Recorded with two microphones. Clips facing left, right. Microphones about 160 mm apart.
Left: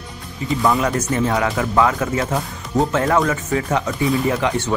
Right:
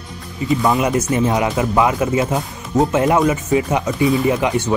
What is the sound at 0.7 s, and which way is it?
Speech, 15° right (ahead or behind).